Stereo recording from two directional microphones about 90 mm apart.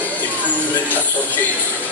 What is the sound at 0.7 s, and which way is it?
Speech, 20° left (ahead or behind).